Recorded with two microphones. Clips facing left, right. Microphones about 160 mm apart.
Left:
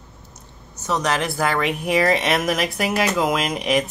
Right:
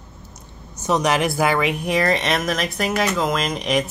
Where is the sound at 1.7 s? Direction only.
5° left (ahead or behind).